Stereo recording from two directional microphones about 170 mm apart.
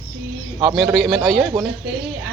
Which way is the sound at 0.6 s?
Centre (ahead or behind).